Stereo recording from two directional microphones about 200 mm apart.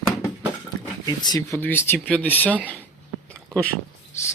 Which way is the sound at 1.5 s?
10° left (ahead or behind).